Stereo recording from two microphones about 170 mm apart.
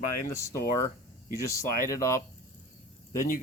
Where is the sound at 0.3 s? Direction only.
15° left (ahead or behind).